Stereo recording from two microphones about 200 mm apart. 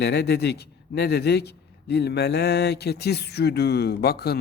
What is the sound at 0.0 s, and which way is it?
A man's voice, 55° left (ahead or behind).